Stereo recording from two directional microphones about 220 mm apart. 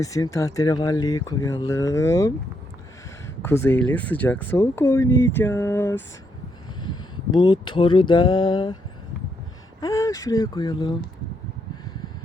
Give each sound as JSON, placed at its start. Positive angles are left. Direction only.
{"t": 0.0, "sound": "speech", "side_deg": 15}
{"t": 3.4, "sound": "speech", "side_deg": 10}
{"t": 6.8, "sound": "speech", "side_deg": 20}
{"t": 9.8, "sound": "speech", "side_deg": 15}